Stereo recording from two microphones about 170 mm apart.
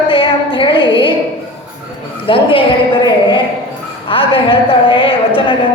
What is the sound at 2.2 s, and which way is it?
A woman's voice, 30° left (ahead or behind).